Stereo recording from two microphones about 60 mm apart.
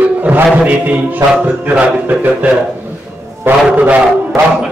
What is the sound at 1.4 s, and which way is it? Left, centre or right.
Mantra, right.